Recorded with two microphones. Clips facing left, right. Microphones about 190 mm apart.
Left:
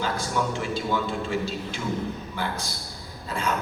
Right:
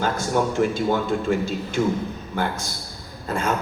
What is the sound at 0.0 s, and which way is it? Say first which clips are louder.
A man's voice: right 5 dB; 50° right (ahead or behind).